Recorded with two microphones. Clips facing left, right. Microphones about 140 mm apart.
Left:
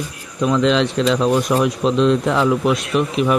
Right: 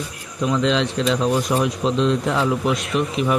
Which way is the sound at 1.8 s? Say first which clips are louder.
Left 4 dB; 90° left.